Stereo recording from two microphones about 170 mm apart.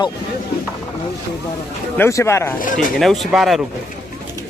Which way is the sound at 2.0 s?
15° left (ahead or behind).